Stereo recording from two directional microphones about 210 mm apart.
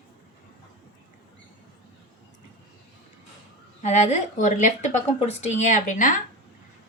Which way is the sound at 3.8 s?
35° left (ahead or behind).